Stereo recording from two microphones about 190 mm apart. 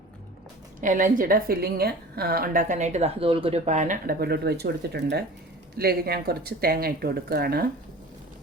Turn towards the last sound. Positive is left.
turn(degrees=-55)  # may be behind; listen again after turning